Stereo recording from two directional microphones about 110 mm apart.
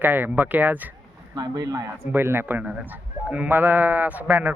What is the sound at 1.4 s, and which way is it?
Speech, 35° right (ahead or behind).